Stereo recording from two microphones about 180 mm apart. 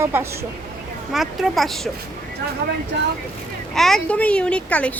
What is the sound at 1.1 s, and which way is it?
Speech, centre (ahead or behind).